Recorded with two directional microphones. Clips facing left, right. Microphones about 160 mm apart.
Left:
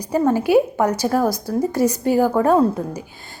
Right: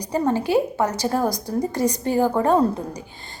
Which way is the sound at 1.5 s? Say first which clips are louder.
Left 4 dB; 10° left (ahead or behind).